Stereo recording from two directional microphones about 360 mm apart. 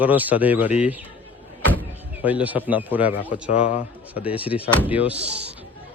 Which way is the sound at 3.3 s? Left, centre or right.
Centre.